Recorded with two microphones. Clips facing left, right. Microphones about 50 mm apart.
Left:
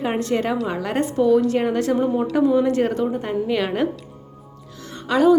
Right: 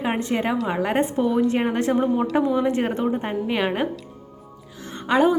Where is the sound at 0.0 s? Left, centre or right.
Centre.